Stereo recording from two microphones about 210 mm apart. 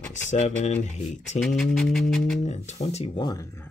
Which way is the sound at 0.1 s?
35° left (ahead or behind).